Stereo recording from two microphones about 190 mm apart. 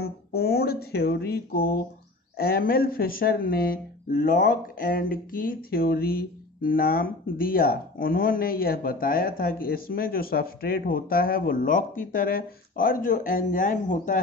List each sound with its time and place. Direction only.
0.0 s speech: 55° left (ahead or behind)